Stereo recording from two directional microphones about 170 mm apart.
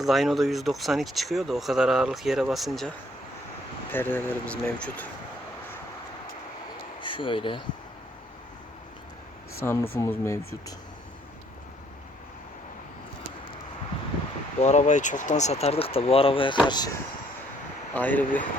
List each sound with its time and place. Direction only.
0.0 s speech: centre (ahead or behind)
3.9 s speech: 10° left (ahead or behind)
7.0 s speech: 30° left (ahead or behind)
9.6 s speech: 15° left (ahead or behind)
14.6 s speech: 45° left (ahead or behind); by 16.9 s 25° left (ahead or behind)
17.9 s speech: 10° left (ahead or behind)